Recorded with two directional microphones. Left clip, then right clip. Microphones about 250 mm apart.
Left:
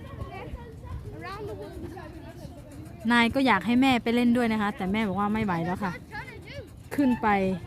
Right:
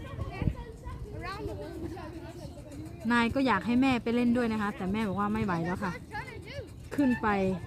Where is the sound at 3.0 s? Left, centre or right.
Left.